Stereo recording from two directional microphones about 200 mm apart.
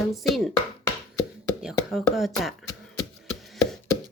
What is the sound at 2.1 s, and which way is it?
Speech, centre (ahead or behind).